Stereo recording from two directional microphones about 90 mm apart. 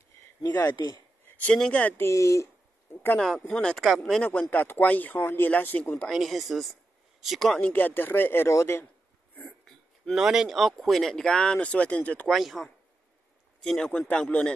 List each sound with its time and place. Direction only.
0.7 s speech: 45° left (ahead or behind)
1.2 s speech: 15° left (ahead or behind)
2.0 s speech: 35° left (ahead or behind)
3.2 s speech: 5° left (ahead or behind)
6.0 s speech: centre (ahead or behind)
7.6 s speech: 20° left (ahead or behind)
10.1 s speech: 5° right (ahead or behind); by 12.3 s 15° left (ahead or behind)
12.3 s speech: centre (ahead or behind)